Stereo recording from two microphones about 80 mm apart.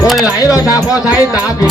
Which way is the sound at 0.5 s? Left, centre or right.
Left.